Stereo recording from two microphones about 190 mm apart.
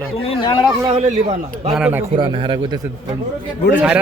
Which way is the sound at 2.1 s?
25° right (ahead or behind).